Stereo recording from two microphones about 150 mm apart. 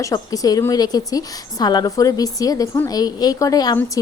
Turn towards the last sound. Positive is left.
turn(degrees=25)  # may be behind; listen again after turning